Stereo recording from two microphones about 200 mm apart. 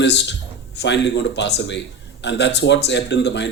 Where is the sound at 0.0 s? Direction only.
60° left (ahead or behind).